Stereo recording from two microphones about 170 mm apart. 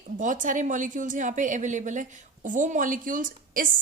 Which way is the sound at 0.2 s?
50° right (ahead or behind).